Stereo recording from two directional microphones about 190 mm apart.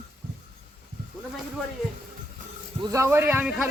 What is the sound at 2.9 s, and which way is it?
Speech, 15° right (ahead or behind).